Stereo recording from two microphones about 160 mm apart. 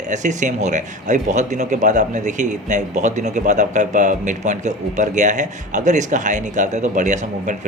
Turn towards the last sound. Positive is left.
turn(degrees=-50)  # may be behind; listen again after turning